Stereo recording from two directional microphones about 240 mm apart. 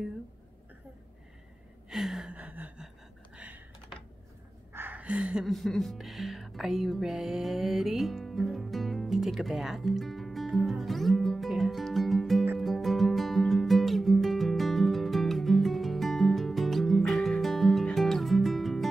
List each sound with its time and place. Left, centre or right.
1.9 s gasp: centre
3.3 s typing: centre
4.7 s music: centre